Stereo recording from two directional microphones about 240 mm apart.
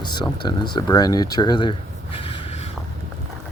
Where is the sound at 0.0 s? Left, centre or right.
Centre.